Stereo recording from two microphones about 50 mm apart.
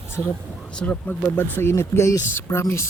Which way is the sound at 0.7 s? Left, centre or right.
Left.